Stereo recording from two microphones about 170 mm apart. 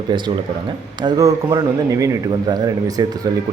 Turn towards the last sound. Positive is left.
turn(degrees=-20)  # may be behind; listen again after turning